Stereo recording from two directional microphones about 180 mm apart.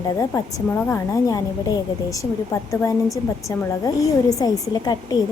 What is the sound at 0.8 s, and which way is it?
Speech, 15° left (ahead or behind).